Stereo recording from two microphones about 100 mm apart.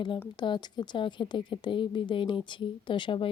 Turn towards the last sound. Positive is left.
turn(degrees=55)  # may be behind; listen again after turning